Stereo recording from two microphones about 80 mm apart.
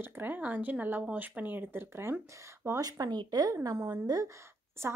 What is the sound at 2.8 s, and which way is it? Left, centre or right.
Speech, right.